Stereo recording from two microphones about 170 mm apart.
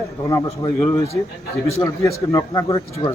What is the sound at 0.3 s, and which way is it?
A man's voice, 20° left (ahead or behind).